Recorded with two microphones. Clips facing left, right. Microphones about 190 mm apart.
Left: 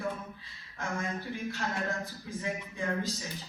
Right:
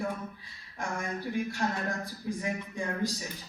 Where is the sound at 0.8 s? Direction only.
15° right (ahead or behind).